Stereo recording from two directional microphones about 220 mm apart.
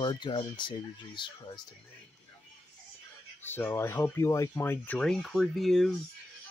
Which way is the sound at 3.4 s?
10° left (ahead or behind).